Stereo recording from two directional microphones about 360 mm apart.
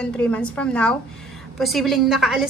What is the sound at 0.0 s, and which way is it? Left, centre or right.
A woman's voice, centre.